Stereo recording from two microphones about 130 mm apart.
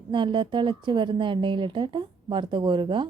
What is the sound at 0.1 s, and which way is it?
A woman's voice, 40° right (ahead or behind).